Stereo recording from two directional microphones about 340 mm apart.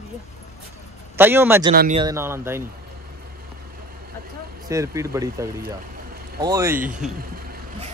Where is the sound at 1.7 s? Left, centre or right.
Right.